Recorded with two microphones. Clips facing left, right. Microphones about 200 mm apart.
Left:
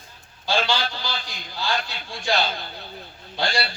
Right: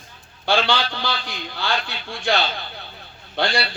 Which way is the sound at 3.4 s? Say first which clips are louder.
Right 3 dB; 60° right (ahead or behind).